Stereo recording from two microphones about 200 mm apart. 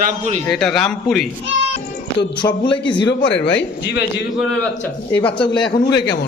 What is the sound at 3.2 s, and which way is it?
Speech, 65° left (ahead or behind).